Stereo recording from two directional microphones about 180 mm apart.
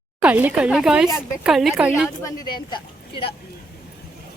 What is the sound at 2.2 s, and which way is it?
A woman's voice, 25° left (ahead or behind).